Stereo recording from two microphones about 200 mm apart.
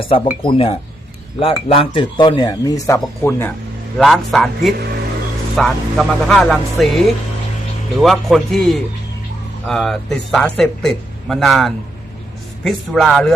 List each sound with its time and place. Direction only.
0.0 s speech: 25° left (ahead or behind)
3.9 s speech: centre (ahead or behind)